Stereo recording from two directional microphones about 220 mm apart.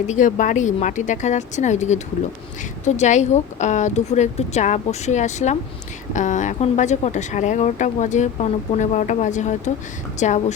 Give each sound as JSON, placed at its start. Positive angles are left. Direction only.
{"t": 0.1, "sound": "speech", "side_deg": 35}